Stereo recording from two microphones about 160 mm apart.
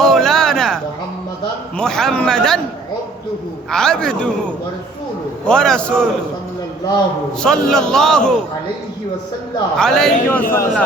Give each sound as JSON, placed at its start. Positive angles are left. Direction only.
{"t": 0.0, "sound": "a sound", "side_deg": 5}
{"t": 1.8, "sound": "a man's voice", "side_deg": 5}
{"t": 3.7, "sound": "a man's voice", "side_deg": 5}
{"t": 7.4, "sound": "a man's voice", "side_deg": 5}
{"t": 9.7, "sound": "a man's voice", "side_deg": 5}